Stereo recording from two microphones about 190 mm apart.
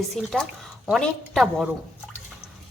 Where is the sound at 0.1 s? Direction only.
Centre (ahead or behind).